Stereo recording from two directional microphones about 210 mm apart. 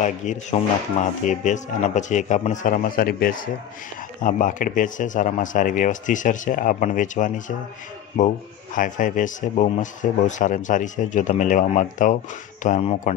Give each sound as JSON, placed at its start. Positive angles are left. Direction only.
{"t": 0.0, "sound": "speech", "side_deg": 35}
{"t": 8.7, "sound": "speech", "side_deg": 40}